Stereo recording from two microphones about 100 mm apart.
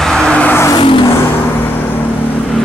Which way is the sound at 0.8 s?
55° left (ahead or behind).